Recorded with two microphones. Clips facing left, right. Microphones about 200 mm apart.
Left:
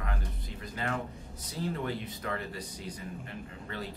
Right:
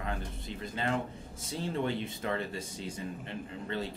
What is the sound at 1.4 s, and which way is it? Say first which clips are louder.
Speech: right 2 dB; 25° right (ahead or behind).